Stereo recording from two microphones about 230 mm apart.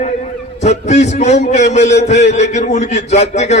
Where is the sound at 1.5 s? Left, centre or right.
Left.